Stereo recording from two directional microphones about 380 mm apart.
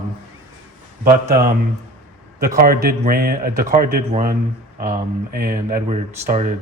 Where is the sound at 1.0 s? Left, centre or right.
Right.